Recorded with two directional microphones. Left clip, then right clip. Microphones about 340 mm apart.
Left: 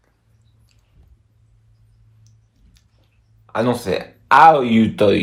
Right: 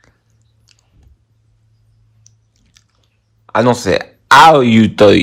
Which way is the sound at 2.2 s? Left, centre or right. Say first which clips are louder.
Right 13 dB; right.